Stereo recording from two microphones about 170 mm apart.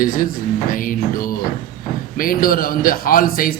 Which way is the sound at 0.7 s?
55° left (ahead or behind).